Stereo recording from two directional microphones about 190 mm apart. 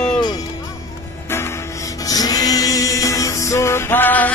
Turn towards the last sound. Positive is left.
turn(degrees=10)  # may be behind; listen again after turning